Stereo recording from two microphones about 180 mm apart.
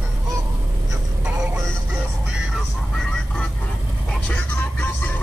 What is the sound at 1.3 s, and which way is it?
Music, 10° right (ahead or behind).